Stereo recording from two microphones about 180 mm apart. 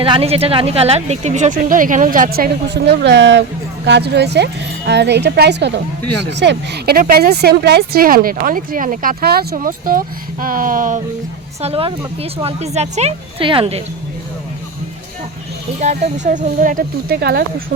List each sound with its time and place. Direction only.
0.0 s speech: 30° right (ahead or behind); by 3.4 s 85° right
3.8 s a woman's voice: 70° right (ahead or behind); by 11.0 s 45° right (ahead or behind)
11.6 s a woman's voice: 30° right (ahead or behind)
15.8 s speech: 40° right (ahead or behind); by 17.4 s 60° right (ahead or behind)